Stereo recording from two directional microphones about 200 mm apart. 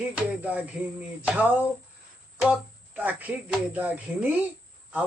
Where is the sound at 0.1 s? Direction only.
5° right (ahead or behind).